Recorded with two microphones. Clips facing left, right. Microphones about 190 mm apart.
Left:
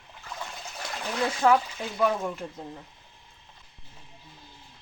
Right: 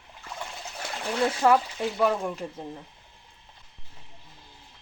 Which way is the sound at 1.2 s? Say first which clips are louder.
Right 1 dB; 5° right (ahead or behind).